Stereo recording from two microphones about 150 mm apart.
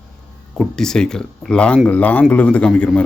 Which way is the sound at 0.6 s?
5° left (ahead or behind).